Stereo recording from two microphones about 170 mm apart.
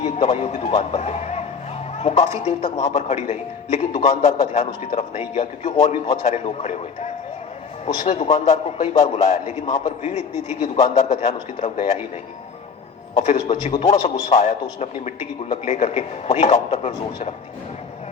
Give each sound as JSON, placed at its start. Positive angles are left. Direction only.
{"t": 0.0, "sound": "a man's voice", "side_deg": 40}
{"t": 9.6, "sound": "a man's voice", "side_deg": 25}
{"t": 10.0, "sound": "a man's voice", "side_deg": 40}
{"t": 13.7, "sound": "a man's voice", "side_deg": 40}